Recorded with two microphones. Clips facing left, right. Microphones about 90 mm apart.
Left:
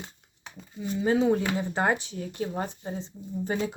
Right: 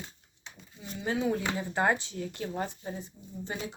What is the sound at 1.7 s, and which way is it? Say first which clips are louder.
Speech: right 2 dB; 20° left (ahead or behind).